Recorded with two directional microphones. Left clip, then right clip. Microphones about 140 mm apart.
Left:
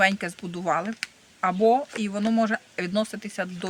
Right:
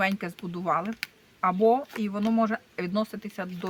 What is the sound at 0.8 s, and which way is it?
Speech, 40° left (ahead or behind).